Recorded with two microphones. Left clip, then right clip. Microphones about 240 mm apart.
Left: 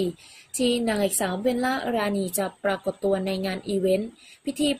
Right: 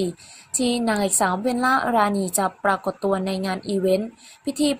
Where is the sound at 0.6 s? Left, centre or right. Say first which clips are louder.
Right 1 dB; centre.